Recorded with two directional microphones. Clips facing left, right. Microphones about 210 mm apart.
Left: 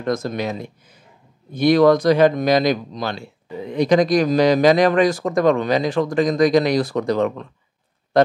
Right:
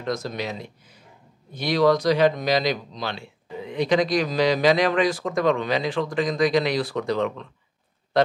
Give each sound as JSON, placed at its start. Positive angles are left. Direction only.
{"t": 0.0, "sound": "speech", "side_deg": 50}